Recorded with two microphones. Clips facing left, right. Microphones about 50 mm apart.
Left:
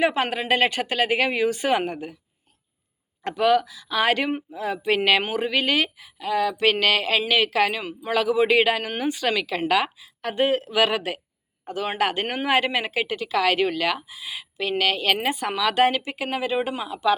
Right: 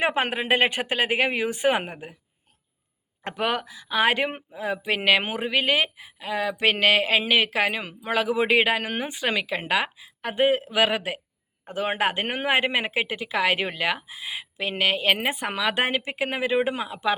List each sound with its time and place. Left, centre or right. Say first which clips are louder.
0.0 s speech: left 2 dB; right
3.2 s speech: left 7 dB; right